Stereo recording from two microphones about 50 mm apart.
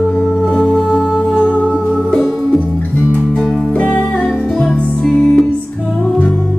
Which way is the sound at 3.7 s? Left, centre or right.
Left.